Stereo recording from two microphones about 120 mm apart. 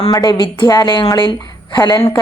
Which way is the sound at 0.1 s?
35° left (ahead or behind).